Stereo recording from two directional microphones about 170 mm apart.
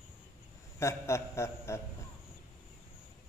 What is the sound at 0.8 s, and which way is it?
A man's voice, 15° left (ahead or behind).